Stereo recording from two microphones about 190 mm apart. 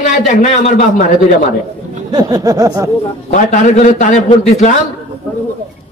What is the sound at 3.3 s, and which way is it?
A man's voice, 40° left (ahead or behind).